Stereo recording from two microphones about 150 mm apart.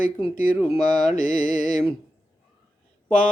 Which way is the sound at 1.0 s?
60° left (ahead or behind).